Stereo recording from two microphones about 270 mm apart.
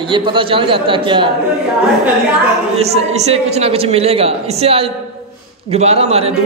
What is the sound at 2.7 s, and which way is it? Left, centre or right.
A man's voice, right.